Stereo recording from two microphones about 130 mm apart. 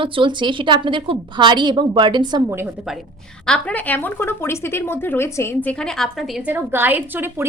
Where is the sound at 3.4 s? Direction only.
10° left (ahead or behind).